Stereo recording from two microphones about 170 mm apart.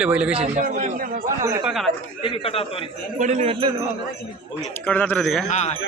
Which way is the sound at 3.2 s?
40° right (ahead or behind).